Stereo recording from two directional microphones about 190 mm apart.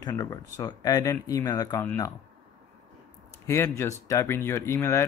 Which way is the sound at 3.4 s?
15° left (ahead or behind).